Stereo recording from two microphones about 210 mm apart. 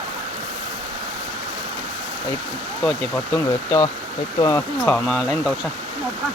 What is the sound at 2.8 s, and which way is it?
Speech, 10° left (ahead or behind).